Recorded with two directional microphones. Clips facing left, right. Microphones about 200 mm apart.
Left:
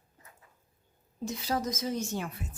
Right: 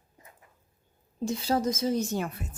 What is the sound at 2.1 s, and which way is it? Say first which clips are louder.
Speech: right 4 dB; 45° right (ahead or behind).